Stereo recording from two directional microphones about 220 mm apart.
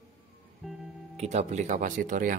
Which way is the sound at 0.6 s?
Centre (ahead or behind).